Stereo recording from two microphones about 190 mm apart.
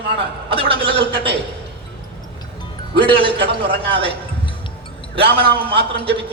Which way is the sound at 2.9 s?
25° right (ahead or behind).